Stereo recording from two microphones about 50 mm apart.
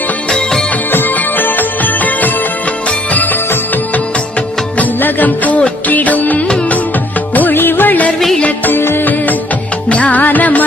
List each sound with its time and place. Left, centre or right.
0.3 s music: centre
0.9 s music: left
4.7 s music: left
6.4 s music: left
7.3 s music: left
8.7 s music: left
9.1 s music: left